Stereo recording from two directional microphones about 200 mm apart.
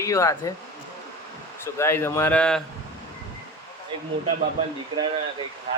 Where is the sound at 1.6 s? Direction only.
10° left (ahead or behind).